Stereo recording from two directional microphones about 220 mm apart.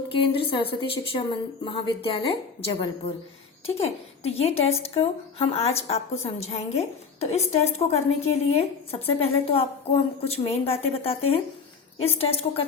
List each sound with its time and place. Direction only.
0.1 s speech: 25° left (ahead or behind)